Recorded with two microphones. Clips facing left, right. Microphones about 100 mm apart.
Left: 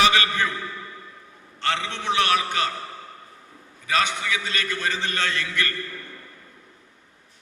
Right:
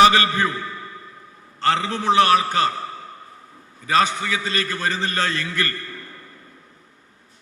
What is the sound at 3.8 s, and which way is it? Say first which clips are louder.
A man's voice: right 4 dB; 35° right (ahead or behind).